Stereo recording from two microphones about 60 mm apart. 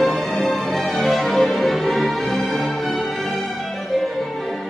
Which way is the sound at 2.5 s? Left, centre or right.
Centre.